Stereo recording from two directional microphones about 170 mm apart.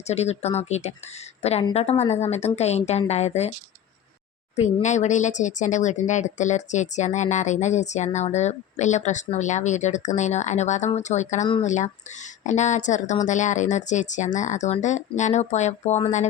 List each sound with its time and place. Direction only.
0.1 s a woman's voice: 40° left (ahead or behind)
4.5 s speech: 45° left (ahead or behind)